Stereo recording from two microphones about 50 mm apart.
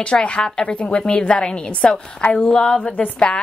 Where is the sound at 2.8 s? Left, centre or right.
Left.